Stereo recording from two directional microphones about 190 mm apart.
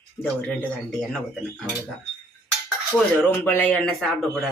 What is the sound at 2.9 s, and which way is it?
Speech, 10° left (ahead or behind).